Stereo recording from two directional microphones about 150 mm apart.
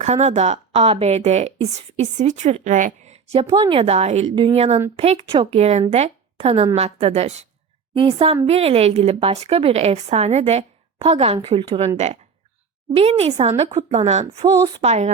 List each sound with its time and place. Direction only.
0.0 s speech: 50° right (ahead or behind)
3.5 s a woman's voice: 35° right (ahead or behind)
12.9 s speech: 40° right (ahead or behind)